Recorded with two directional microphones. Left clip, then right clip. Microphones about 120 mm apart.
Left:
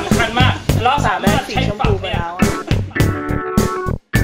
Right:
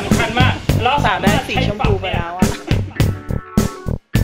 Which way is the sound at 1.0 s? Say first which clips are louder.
Right 1 dB; 30° right (ahead or behind).